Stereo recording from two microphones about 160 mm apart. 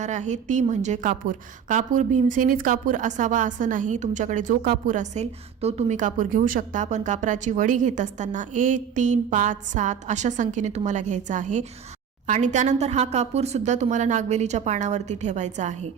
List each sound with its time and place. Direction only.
0.0 s a woman's voice: 45° right (ahead or behind)